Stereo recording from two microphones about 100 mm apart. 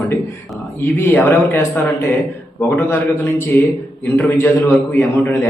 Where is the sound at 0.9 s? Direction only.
25° left (ahead or behind).